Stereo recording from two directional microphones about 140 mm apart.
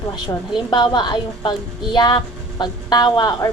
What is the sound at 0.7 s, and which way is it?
A woman's voice, 30° left (ahead or behind).